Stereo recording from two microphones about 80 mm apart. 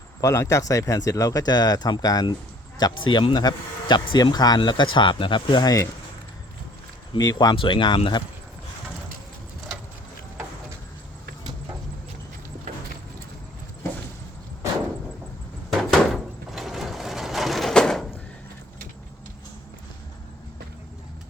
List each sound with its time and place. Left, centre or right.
0.2 s speech: left
2.7 s speech: left
5.6 s speech: left
7.2 s speech: left
7.5 s speech: left
15.8 s a sound: centre